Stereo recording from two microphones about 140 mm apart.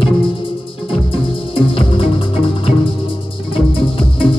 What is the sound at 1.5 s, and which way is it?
Music, 40° left (ahead or behind).